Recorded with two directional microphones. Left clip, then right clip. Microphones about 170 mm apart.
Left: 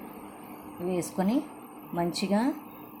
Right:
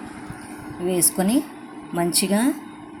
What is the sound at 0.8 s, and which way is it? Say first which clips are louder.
A woman's voice: right 7 dB; 25° right (ahead or behind).